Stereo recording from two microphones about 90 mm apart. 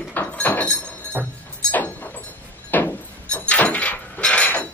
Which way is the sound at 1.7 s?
20° left (ahead or behind).